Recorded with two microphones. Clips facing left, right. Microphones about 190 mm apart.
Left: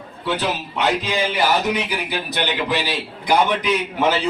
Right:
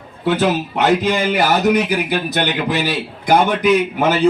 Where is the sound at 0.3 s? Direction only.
50° right (ahead or behind).